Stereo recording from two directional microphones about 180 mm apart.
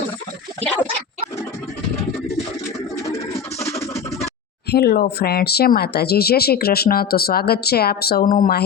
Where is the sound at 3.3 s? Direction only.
35° left (ahead or behind).